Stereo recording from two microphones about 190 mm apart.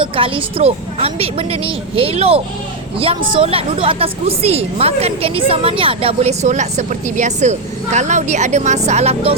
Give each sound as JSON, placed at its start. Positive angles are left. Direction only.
{"t": 0.0, "sound": "a woman's voice", "side_deg": -30}